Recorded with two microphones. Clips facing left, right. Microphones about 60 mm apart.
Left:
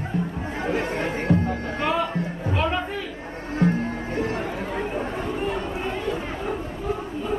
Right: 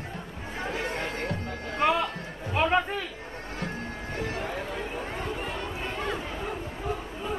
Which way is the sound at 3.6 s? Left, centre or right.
Left.